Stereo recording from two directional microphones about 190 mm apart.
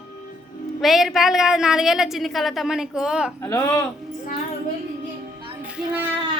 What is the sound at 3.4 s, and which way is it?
Speech, 15° left (ahead or behind).